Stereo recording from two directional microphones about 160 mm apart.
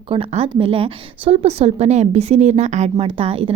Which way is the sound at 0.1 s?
40° right (ahead or behind).